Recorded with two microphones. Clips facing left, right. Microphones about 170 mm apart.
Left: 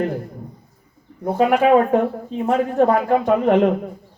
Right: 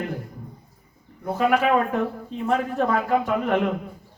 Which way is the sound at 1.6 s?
50° left (ahead or behind).